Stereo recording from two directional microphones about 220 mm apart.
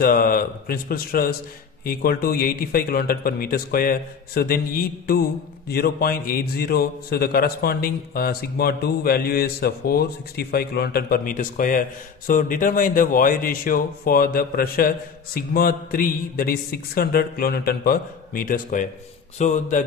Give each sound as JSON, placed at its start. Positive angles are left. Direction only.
{"t": 0.0, "sound": "a man's voice", "side_deg": 40}